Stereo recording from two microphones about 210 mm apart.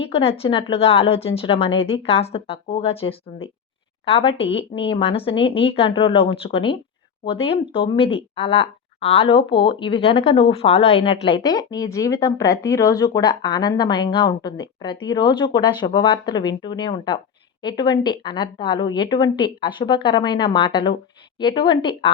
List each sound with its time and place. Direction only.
0.0 s speech: 25° left (ahead or behind)